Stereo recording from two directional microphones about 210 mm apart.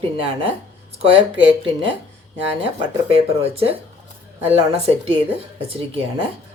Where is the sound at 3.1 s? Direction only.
30° right (ahead or behind).